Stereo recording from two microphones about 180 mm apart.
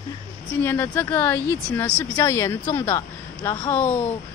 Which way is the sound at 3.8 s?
40° left (ahead or behind).